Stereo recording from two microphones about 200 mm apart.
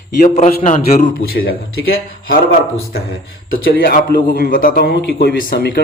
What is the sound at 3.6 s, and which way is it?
A man's voice, 50° left (ahead or behind).